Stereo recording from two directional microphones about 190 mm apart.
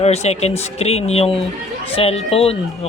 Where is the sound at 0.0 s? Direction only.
35° left (ahead or behind).